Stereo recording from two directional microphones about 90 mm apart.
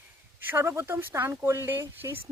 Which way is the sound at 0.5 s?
30° right (ahead or behind).